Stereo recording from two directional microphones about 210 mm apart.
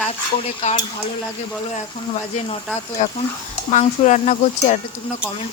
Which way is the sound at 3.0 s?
35° left (ahead or behind).